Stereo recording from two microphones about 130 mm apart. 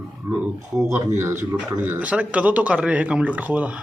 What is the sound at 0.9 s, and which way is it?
A man's voice, 20° right (ahead or behind).